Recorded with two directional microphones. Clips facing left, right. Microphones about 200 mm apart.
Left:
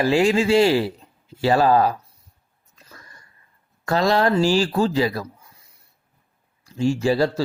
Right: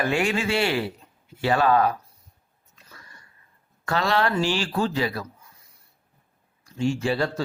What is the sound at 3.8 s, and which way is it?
Speech, 40° left (ahead or behind).